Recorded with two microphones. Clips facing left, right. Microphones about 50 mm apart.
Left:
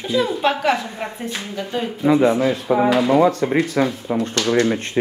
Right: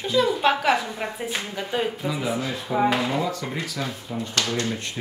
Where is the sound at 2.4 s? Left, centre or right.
Left.